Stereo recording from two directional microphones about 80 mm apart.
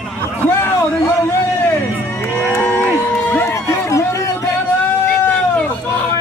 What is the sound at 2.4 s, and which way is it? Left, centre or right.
Crowd, left.